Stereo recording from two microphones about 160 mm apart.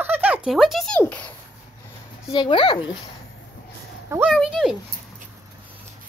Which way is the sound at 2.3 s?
30° left (ahead or behind).